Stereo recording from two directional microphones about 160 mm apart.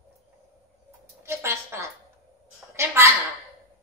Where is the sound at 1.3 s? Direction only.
15° right (ahead or behind).